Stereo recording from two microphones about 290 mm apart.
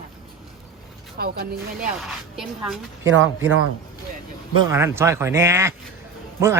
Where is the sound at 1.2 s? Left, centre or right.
Right.